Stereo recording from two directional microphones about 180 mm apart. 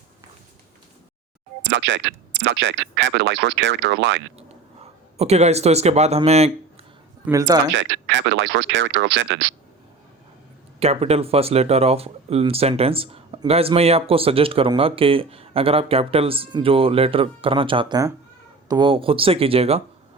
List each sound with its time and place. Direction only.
1.6 s speech: 90° right
4.4 s speech: 35° right (ahead or behind)
7.3 s speech: 20° right (ahead or behind)
7.7 s speech: 80° right
10.8 s speech: 35° right (ahead or behind)